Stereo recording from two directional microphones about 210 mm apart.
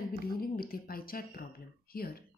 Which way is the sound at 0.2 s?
45° left (ahead or behind).